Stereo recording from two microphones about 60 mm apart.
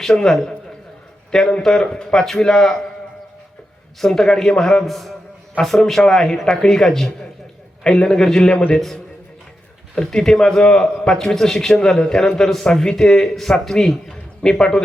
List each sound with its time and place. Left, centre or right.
0.0 s a man's voice: centre
4.0 s a man's voice: centre
9.9 s a man's voice: centre